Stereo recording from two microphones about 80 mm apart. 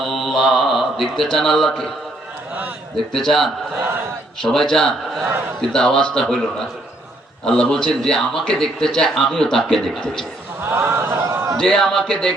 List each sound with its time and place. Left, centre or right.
0.0 s mantra: centre
1.4 s a man's voice: centre
3.1 s a man's voice: centre
7.4 s a man's voice: centre
10.6 s a sound: right
11.5 s a man's voice: centre